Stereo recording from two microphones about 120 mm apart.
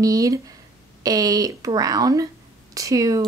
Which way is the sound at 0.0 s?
30° right (ahead or behind).